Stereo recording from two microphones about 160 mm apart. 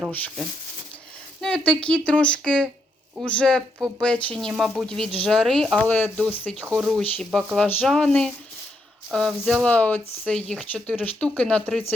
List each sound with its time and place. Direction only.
1.4 s speech: 5° left (ahead or behind)
3.8 s speech: 15° right (ahead or behind)
4.0 s speech: 5° left (ahead or behind)